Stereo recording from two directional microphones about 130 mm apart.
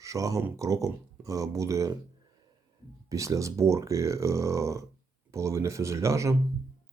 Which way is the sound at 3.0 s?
25° right (ahead or behind).